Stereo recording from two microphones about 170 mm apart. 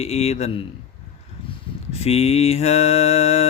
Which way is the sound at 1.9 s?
35° left (ahead or behind).